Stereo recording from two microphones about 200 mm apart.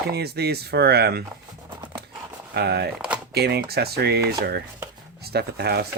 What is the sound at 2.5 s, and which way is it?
Chopping, 55° right (ahead or behind).